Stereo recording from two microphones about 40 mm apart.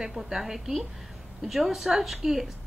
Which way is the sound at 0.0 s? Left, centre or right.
Centre.